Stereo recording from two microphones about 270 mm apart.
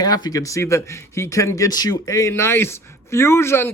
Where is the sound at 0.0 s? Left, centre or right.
Centre.